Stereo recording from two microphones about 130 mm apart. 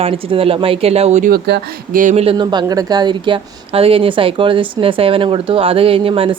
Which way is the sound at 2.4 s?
35° right (ahead or behind).